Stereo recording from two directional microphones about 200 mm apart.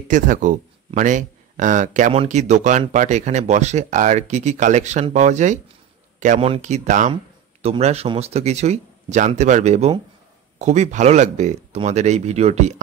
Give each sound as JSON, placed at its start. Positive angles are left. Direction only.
{"t": 0.1, "sound": "speech", "side_deg": -40}